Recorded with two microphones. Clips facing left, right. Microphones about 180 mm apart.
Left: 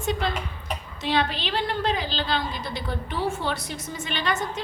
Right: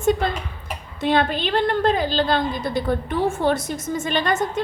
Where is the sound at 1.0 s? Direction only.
50° right (ahead or behind).